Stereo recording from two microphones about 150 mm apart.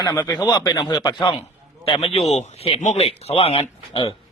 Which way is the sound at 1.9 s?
40° left (ahead or behind).